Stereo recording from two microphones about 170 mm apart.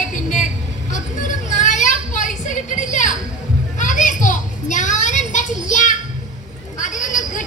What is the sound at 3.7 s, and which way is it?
Children playing, 50° left (ahead or behind).